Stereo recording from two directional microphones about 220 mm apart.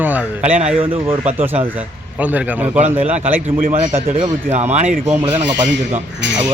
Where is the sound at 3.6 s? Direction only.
30° right (ahead or behind).